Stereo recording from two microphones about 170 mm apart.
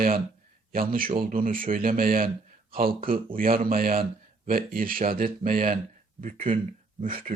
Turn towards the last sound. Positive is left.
turn(degrees=-55)  # may be behind; listen again after turning